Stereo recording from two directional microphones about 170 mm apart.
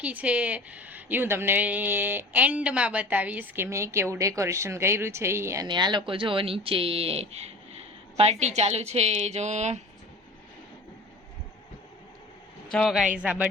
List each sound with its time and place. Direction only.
0.0 s a woman's voice: 10° right (ahead or behind)
5.6 s a woman's voice: 25° right (ahead or behind); by 9.8 s 45° right (ahead or behind)
12.7 s a man's voice: centre (ahead or behind)